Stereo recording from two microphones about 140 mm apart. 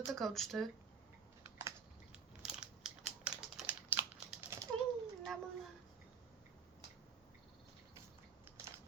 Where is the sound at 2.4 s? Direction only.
5° right (ahead or behind).